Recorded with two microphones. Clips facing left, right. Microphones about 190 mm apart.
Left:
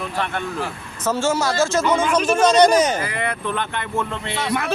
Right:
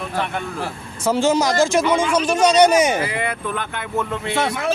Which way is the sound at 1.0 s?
15° right (ahead or behind).